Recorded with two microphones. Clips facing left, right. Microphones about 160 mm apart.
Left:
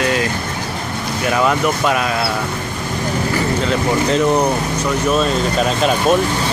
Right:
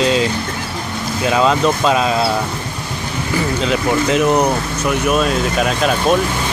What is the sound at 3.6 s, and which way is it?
Speech, 15° right (ahead or behind).